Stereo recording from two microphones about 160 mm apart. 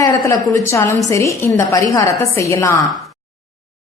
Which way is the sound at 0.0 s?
20° left (ahead or behind).